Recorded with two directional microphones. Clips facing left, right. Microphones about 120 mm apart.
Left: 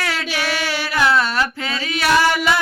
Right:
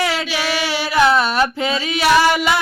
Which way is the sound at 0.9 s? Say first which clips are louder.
Right 3 dB; 20° right (ahead or behind).